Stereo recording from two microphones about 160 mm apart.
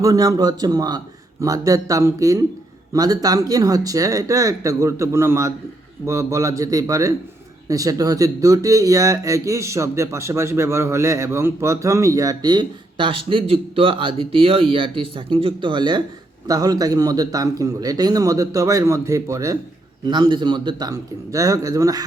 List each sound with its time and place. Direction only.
0.0 s speech: 20° right (ahead or behind)